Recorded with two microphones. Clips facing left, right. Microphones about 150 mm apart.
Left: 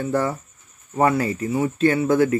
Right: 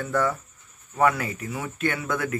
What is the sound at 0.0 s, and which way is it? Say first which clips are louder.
Speech: left 3 dB; 25° left (ahead or behind).